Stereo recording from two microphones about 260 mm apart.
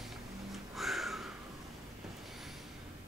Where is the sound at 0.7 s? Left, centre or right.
Centre.